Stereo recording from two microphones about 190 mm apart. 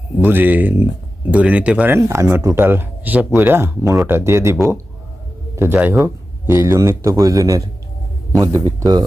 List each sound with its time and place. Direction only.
0.2 s speech: 10° right (ahead or behind)
5.5 s speech: 10° right (ahead or behind)